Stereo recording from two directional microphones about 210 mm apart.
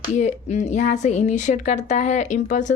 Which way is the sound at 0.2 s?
30° left (ahead or behind).